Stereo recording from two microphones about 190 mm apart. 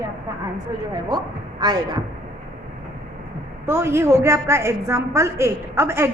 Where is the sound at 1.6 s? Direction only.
20° right (ahead or behind).